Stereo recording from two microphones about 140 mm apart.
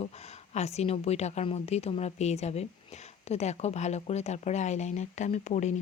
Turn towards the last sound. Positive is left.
turn(degrees=55)  # may be behind; listen again after turning